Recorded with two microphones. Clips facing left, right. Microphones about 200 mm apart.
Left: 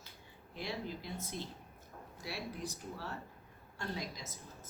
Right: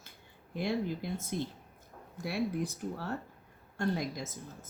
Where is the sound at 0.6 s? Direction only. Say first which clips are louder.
Right 9 dB; 55° right (ahead or behind).